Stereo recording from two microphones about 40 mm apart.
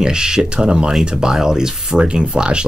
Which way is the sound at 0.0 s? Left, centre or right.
Centre.